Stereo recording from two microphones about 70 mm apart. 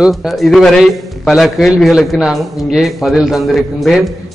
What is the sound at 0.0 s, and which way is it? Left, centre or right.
A man's voice, centre.